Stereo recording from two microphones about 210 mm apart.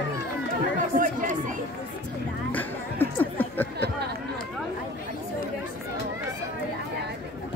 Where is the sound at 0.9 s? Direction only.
40° right (ahead or behind).